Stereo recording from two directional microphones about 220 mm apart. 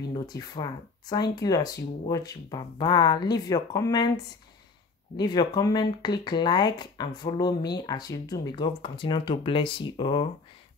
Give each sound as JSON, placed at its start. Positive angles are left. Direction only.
{"t": 0.1, "sound": "speech", "side_deg": 20}
{"t": 5.1, "sound": "speech", "side_deg": 20}